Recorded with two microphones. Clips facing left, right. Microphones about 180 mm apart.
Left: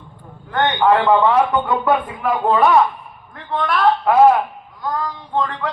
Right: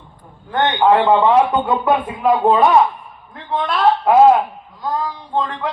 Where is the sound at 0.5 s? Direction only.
20° right (ahead or behind).